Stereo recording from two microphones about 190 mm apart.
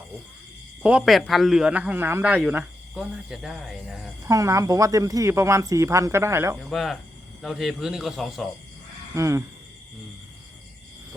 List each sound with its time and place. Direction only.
0.8 s speech: 5° right (ahead or behind)
4.2 s speech: 15° right (ahead or behind)
6.6 s speech: centre (ahead or behind)
9.1 s speech: 15° right (ahead or behind)